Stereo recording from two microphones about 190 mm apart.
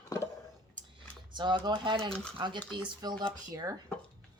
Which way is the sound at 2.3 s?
25° right (ahead or behind).